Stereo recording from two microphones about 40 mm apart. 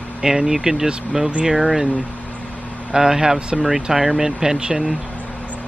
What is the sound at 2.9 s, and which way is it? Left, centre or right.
Speech, centre.